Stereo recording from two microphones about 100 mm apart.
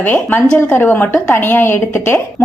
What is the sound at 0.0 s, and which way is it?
A woman's voice, 20° left (ahead or behind).